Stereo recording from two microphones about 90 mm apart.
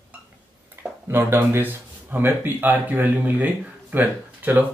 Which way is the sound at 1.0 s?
25° right (ahead or behind).